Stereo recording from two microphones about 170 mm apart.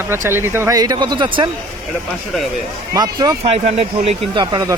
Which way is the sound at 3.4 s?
40° right (ahead or behind).